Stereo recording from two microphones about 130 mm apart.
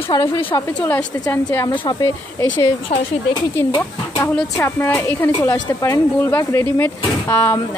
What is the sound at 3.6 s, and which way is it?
Speech, 20° left (ahead or behind).